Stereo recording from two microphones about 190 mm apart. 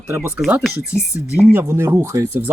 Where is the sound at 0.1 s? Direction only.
15° right (ahead or behind).